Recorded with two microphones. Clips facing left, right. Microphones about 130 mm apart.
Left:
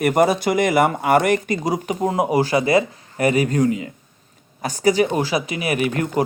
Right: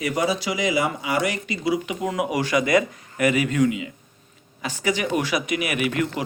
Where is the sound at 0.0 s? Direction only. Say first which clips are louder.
Left 7 dB; 55° left (ahead or behind).